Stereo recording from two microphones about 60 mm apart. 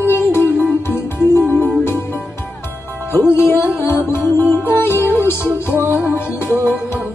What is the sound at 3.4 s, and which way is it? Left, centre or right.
Music, left.